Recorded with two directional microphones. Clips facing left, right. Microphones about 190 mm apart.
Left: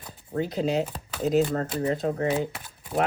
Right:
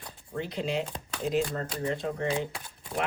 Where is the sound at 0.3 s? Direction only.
40° left (ahead or behind).